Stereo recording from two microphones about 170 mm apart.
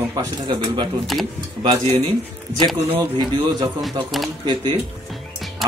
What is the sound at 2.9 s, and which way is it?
Speech, 25° right (ahead or behind).